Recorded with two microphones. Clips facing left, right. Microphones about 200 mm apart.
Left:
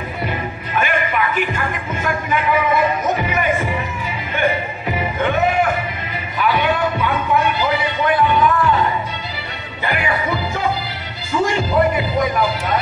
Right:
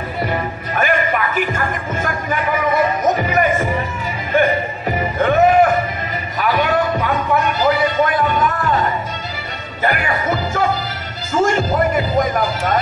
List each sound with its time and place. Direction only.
0.2 s music: 40° right (ahead or behind)
4.8 s music: 45° right (ahead or behind)
6.3 s a sound: 45° right (ahead or behind)
9.8 s music: 45° right (ahead or behind)